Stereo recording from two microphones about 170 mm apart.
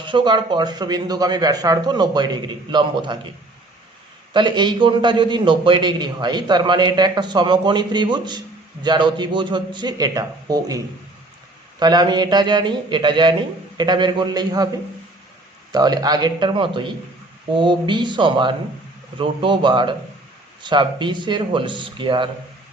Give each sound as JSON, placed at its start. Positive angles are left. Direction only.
{"t": 0.0, "sound": "a man's voice", "side_deg": -30}
{"t": 4.4, "sound": "a man's voice", "side_deg": -25}
{"t": 15.7, "sound": "a man's voice", "side_deg": -25}